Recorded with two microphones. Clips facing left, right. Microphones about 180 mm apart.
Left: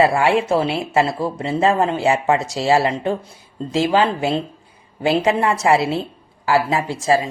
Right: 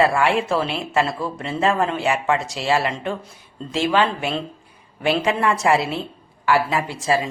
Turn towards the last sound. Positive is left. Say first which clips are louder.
# left 3 dB
turn(degrees=35)  # may be behind; listen again after turning